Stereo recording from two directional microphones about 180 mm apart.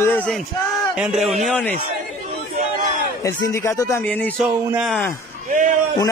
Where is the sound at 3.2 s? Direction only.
15° left (ahead or behind).